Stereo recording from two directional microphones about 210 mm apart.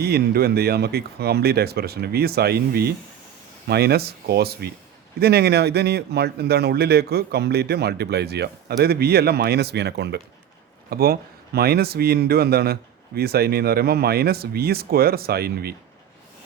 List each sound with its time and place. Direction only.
0.0 s speech: 50° right (ahead or behind)